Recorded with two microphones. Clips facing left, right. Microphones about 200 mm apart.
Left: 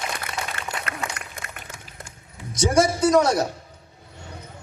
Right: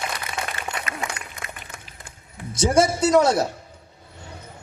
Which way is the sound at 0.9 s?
65° left (ahead or behind).